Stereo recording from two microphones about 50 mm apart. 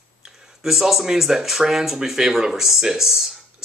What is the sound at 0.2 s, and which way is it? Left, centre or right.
Speech, centre.